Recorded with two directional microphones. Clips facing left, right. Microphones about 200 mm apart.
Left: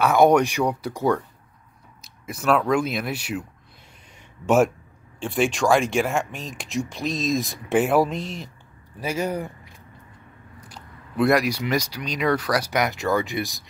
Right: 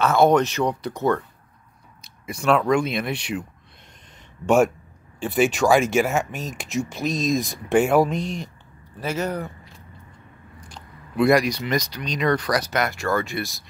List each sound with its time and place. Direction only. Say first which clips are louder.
0.0 s speech: left 1 dB; 10° left (ahead or behind)
4.5 s speech: right 1 dB; centre (ahead or behind)
10.7 s speech: right 2 dB; centre (ahead or behind); by 13.7 s 15° left (ahead or behind)